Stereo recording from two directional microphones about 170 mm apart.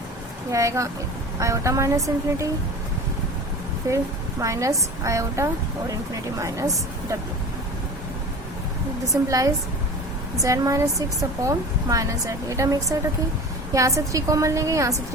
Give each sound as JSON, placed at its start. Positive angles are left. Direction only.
{"t": 0.5, "sound": "a woman's voice", "side_deg": -15}
{"t": 3.8, "sound": "a woman's voice", "side_deg": -20}
{"t": 10.4, "sound": "a woman's voice", "side_deg": -20}